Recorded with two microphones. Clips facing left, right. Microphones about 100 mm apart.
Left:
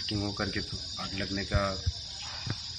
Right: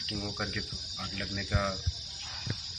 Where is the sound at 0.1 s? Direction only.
15° left (ahead or behind).